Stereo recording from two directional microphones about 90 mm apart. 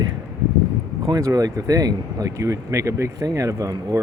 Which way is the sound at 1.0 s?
45° right (ahead or behind).